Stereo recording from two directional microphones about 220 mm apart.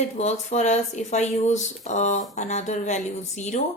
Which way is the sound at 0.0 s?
30° left (ahead or behind).